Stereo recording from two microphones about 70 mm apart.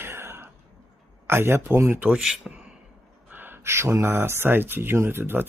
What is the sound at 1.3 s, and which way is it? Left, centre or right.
Speech, right.